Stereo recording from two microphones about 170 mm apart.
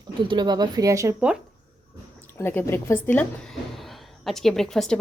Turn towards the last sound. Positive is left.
turn(degrees=0)  # may be behind; listen again after turning